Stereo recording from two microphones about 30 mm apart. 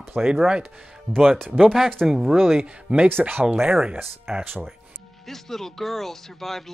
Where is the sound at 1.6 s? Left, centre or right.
Centre.